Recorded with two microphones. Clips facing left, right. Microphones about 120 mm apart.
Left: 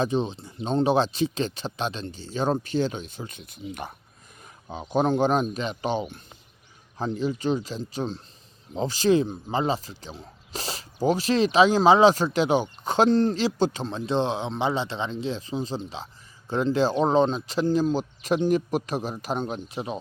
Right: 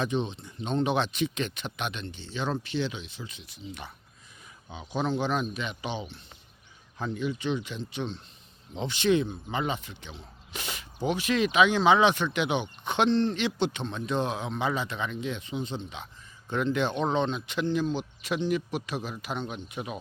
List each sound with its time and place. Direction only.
0.0 s speech: 35° left (ahead or behind)
7.0 s speech: 35° left (ahead or behind)